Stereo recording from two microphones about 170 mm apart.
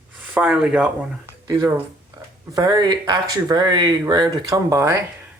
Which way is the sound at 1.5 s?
20° right (ahead or behind).